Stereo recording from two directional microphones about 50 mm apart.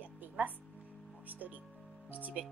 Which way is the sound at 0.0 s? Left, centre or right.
Right.